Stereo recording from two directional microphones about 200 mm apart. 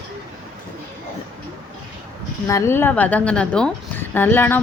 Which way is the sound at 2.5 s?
15° left (ahead or behind).